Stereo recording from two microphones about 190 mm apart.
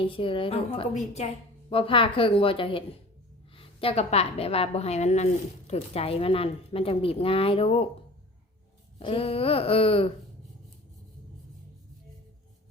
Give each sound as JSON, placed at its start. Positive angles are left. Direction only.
{"t": 0.1, "sound": "a woman's voice", "side_deg": 25}
{"t": 9.0, "sound": "a woman's voice", "side_deg": 30}